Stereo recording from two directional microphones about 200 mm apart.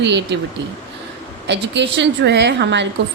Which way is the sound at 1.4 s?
60° right (ahead or behind).